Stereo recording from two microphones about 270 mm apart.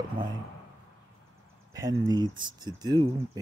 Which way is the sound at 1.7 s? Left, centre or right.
Centre.